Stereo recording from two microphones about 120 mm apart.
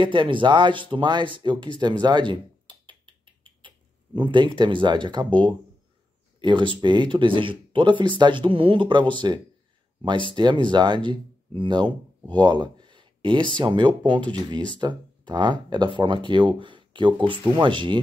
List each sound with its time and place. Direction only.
0.0 s speech: 45° right (ahead or behind)